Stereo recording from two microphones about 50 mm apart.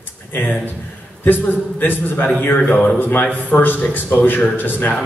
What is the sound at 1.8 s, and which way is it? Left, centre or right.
A man's voice, left.